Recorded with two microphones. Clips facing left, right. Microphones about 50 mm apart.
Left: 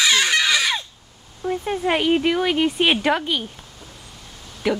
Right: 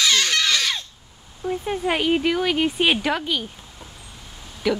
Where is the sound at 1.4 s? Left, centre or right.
Centre.